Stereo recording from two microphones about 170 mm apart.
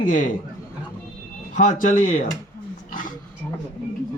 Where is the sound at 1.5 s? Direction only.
50° left (ahead or behind).